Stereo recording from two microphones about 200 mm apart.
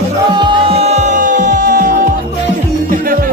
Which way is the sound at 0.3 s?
25° right (ahead or behind).